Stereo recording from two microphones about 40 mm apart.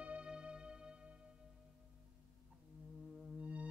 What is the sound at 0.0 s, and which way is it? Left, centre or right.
Music, right.